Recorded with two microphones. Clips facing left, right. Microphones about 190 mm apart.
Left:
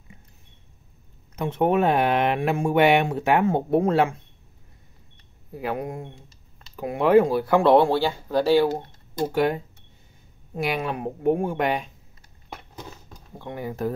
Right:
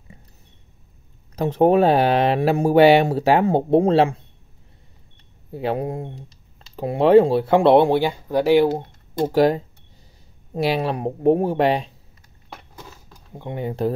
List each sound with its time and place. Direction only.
1.3 s speech: 35° right (ahead or behind)
5.5 s speech: 30° right (ahead or behind)
9.3 s speech: 35° right (ahead or behind)
13.3 s speech: 20° right (ahead or behind)